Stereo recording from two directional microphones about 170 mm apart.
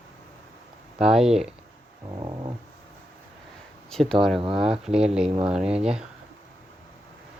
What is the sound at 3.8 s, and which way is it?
Speech, centre (ahead or behind).